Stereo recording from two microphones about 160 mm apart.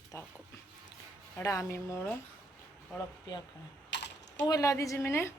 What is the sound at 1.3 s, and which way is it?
Speech, 20° left (ahead or behind).